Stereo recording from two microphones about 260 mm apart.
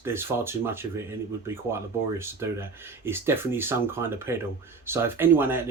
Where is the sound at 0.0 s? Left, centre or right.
Centre.